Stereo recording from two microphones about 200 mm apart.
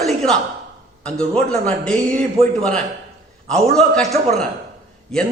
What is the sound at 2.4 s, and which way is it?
Speech, 30° right (ahead or behind).